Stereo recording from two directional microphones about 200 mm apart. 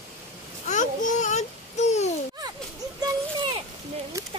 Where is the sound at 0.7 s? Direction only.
40° left (ahead or behind).